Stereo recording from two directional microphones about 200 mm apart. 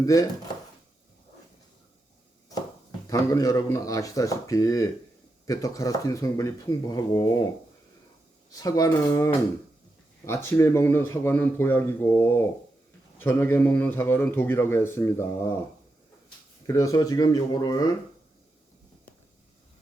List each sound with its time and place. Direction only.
0.0 s a man's voice: 15° left (ahead or behind)
3.1 s a man's voice: 15° left (ahead or behind)
8.5 s a man's voice: 15° left (ahead or behind)
16.6 s a man's voice: 15° left (ahead or behind)